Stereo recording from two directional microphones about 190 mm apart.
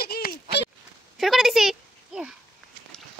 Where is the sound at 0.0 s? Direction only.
50° left (ahead or behind).